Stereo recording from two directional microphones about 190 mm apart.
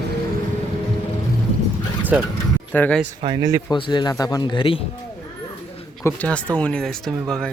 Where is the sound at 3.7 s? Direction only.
25° left (ahead or behind).